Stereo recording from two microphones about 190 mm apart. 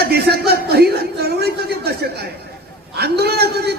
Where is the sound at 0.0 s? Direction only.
55° right (ahead or behind).